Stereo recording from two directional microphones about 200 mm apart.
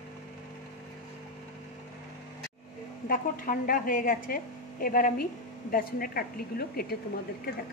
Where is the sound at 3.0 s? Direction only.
45° left (ahead or behind).